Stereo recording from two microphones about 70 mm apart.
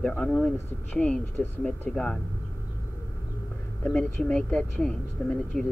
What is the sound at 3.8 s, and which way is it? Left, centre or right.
Speech, centre.